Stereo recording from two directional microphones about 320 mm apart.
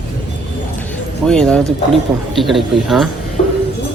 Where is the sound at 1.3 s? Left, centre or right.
Centre.